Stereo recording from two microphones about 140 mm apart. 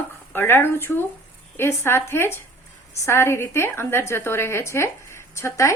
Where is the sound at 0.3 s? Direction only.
15° left (ahead or behind).